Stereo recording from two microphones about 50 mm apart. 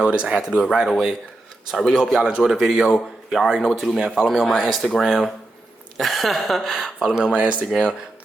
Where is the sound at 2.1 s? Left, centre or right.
Centre.